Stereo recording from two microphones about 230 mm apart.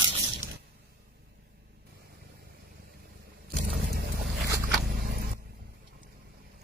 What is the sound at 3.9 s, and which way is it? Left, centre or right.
Boat, right.